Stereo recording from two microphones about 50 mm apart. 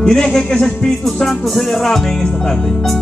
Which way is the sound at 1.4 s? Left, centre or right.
Centre.